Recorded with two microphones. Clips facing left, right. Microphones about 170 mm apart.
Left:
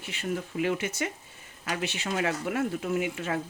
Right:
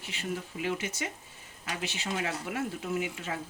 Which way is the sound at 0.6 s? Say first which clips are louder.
Left 5 dB; 60° left (ahead or behind).